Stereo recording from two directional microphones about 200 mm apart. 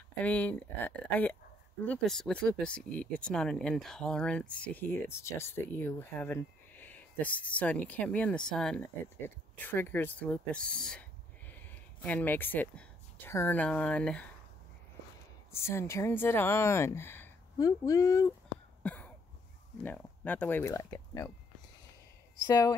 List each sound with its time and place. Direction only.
0.2 s speech: 10° left (ahead or behind)
15.5 s speech: 15° left (ahead or behind)
18.8 s cough: 5° left (ahead or behind)
19.8 s speech: 10° left (ahead or behind)